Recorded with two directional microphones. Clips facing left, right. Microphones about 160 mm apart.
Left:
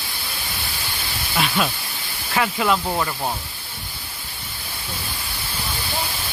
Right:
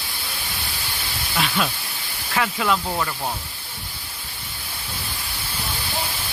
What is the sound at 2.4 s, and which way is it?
Speech, 25° left (ahead or behind).